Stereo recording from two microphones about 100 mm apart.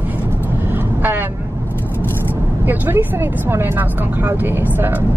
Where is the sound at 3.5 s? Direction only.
25° right (ahead or behind).